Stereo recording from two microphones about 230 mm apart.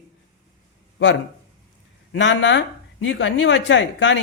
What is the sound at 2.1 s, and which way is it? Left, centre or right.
Speech, left.